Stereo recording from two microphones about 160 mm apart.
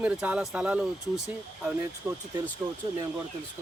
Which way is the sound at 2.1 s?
15° right (ahead or behind).